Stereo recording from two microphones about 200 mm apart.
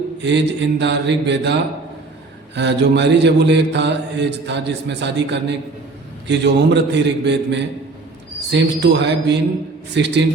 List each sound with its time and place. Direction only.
0.2 s mantra: 60° right (ahead or behind)
2.6 s mantra: 60° right (ahead or behind)